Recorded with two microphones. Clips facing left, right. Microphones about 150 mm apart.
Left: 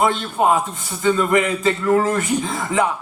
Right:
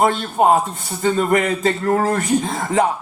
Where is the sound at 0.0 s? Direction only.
40° right (ahead or behind).